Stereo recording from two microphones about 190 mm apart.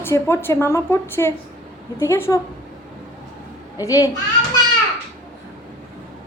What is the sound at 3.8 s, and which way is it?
Speech, 15° left (ahead or behind).